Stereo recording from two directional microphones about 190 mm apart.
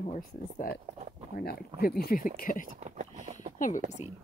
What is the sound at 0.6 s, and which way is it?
Speech, 50° left (ahead or behind).